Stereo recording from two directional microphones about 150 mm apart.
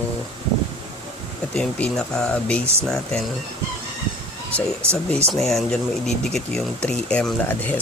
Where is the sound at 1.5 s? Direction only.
5° left (ahead or behind).